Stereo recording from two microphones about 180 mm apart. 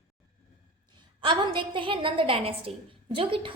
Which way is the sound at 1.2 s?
25° right (ahead or behind).